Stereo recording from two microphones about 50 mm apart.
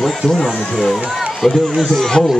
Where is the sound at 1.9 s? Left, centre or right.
Centre.